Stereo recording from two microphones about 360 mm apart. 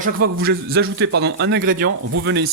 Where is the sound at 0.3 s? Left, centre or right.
Right.